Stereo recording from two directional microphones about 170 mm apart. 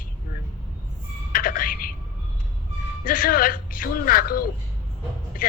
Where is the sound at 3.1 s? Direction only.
55° left (ahead or behind).